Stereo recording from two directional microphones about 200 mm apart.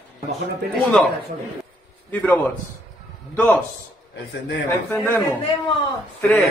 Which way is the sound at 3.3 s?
10° left (ahead or behind).